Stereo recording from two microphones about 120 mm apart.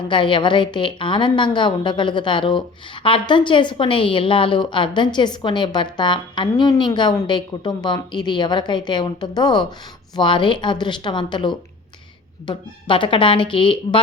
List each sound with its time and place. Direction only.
0.1 s a woman's voice: 45° left (ahead or behind)